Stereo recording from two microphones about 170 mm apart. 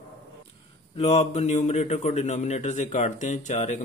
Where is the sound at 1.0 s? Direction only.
40° left (ahead or behind).